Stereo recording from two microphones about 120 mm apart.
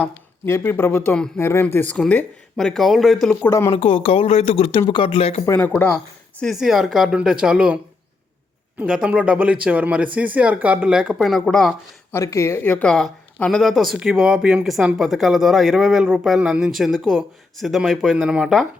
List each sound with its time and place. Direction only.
0.4 s speech: 20° left (ahead or behind); by 3.3 s centre (ahead or behind)
3.7 s speech: 50° left (ahead or behind)
5.5 s speech: 10° left (ahead or behind)
6.4 s speech: centre (ahead or behind)
8.8 s speech: 10° right (ahead or behind)
12.1 s speech: 25° left (ahead or behind); by 18.6 s 5° right (ahead or behind)